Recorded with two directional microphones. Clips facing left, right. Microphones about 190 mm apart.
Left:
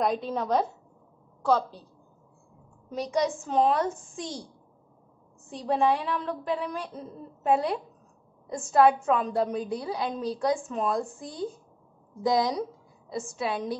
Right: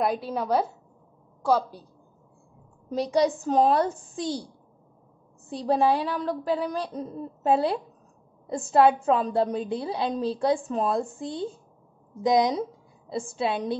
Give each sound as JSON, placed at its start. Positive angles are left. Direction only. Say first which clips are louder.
{"t": 0.0, "sound": "a woman's voice", "louder": "right 1 dB", "side_deg": -5}
{"t": 2.9, "sound": "a woman's voice", "louder": "right 4 dB", "side_deg": -35}
{"t": 5.5, "sound": "a woman's voice", "louder": "right 2 dB", "side_deg": -35}